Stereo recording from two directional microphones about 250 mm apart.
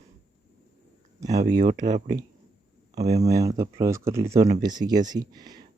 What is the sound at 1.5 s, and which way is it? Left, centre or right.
Speech, right.